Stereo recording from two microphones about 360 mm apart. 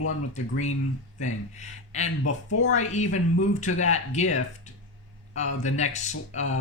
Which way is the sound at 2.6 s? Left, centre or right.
Centre.